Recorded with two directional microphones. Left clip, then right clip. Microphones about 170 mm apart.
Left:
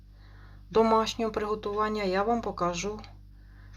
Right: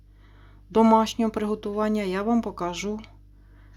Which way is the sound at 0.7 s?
65° right (ahead or behind).